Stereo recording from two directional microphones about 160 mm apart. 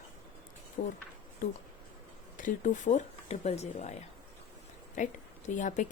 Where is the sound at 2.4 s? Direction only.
50° left (ahead or behind).